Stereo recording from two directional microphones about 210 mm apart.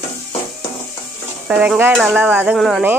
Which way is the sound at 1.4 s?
5° right (ahead or behind).